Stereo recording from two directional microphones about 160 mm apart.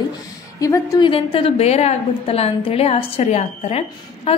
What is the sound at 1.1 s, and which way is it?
A woman's voice, 35° left (ahead or behind).